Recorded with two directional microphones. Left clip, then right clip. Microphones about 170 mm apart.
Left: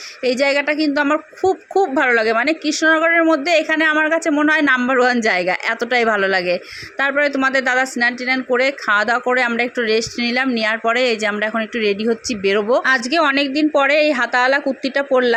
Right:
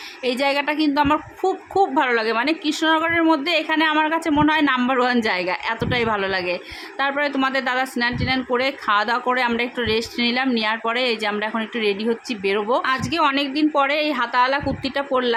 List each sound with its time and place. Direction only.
0.3 s a woman's voice: 15° left (ahead or behind)